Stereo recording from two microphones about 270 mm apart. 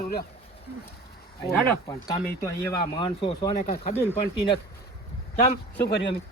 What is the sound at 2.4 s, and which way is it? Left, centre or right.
Speech, centre.